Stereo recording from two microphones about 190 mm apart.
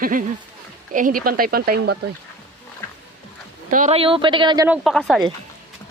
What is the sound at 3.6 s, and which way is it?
Speech, 40° right (ahead or behind).